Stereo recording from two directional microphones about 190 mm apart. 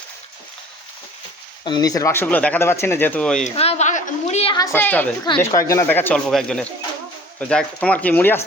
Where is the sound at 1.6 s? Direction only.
20° left (ahead or behind); by 3.4 s 5° left (ahead or behind).